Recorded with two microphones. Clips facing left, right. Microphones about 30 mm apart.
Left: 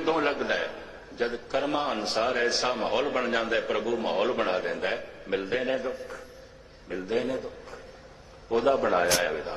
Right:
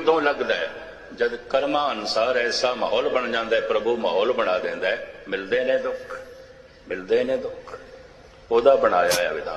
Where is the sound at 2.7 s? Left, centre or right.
Centre.